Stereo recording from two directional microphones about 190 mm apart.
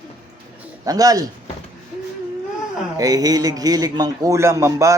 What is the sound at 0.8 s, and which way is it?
Speech, 20° right (ahead or behind).